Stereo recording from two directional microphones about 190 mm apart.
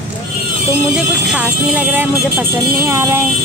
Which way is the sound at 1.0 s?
5° right (ahead or behind).